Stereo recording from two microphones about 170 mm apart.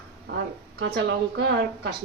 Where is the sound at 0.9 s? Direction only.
75° right (ahead or behind).